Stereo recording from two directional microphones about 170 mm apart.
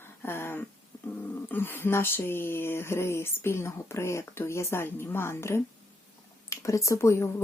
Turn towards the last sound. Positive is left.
turn(degrees=15)  # may be behind; listen again after turning